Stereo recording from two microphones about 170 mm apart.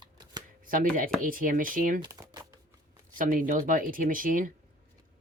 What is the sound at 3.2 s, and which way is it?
Speech, 55° right (ahead or behind).